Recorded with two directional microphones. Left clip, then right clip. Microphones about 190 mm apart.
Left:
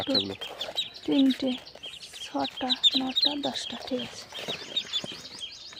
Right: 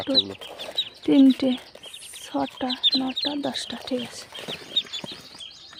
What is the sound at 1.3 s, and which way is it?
Speech, 40° right (ahead or behind).